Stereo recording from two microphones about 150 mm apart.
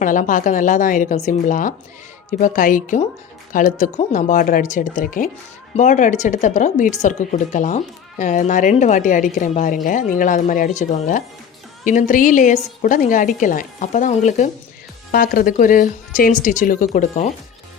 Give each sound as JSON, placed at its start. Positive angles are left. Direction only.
{"t": 0.0, "sound": "a woman's voice", "side_deg": 60}
{"t": 15.1, "sound": "a woman's voice", "side_deg": 80}